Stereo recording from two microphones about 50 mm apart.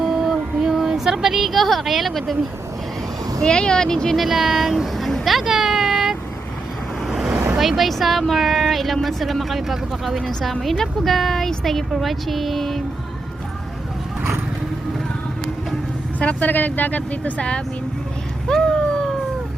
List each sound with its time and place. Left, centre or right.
0.0 s a sound: centre
3.4 s speech: centre
4.2 s speech: centre
5.5 s a sound: centre
7.1 s vehicle: centre
7.6 s speech: centre
16.2 s speech: left
18.5 s cat: centre